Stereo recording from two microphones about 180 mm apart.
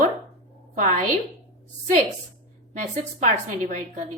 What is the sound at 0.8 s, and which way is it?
Speech, 45° right (ahead or behind).